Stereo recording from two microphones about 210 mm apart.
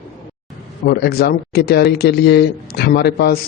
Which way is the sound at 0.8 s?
45° left (ahead or behind).